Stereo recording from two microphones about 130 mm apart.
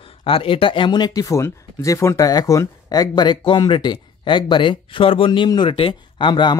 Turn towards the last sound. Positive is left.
turn(degrees=35)  # may be behind; listen again after turning